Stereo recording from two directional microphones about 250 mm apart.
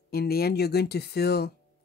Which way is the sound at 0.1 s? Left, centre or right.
Left.